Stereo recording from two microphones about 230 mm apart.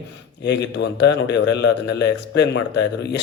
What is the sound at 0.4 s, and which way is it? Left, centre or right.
A man's voice, left.